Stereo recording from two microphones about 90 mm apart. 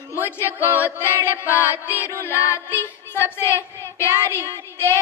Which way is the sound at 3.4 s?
30° left (ahead or behind).